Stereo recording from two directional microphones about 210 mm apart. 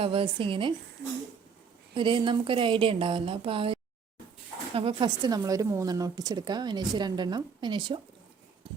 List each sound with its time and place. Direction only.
0.0 s a woman's voice: 25° right (ahead or behind)
2.0 s a woman's voice: 25° right (ahead or behind)